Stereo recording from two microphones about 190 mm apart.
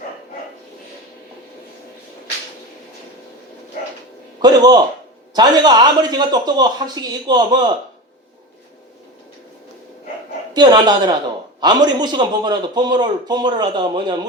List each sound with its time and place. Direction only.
4.4 s a man's voice: 20° right (ahead or behind)
10.5 s a man's voice: 20° right (ahead or behind)